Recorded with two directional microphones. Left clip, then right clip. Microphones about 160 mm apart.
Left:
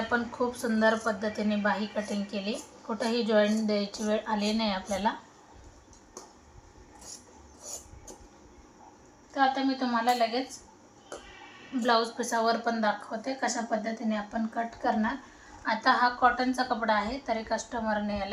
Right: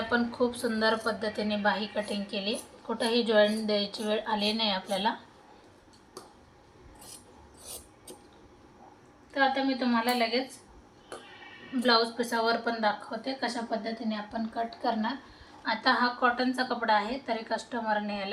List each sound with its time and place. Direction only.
0.1 s a woman's voice: 15° right (ahead or behind)
9.3 s a woman's voice: 35° right (ahead or behind)
11.8 s a woman's voice: 25° right (ahead or behind)
13.1 s a woman's voice: centre (ahead or behind)
15.6 s a woman's voice: 15° right (ahead or behind)